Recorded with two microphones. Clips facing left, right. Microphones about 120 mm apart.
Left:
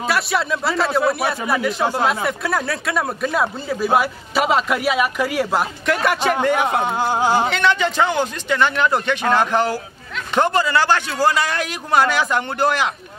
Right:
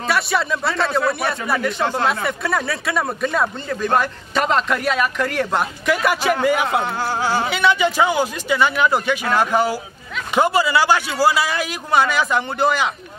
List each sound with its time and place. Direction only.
0.1 s a man's voice: centre (ahead or behind)
6.8 s speech: 20° left (ahead or behind)
7.4 s a man's voice: 5° right (ahead or behind)